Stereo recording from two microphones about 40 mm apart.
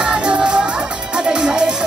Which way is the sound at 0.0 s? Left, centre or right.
Right.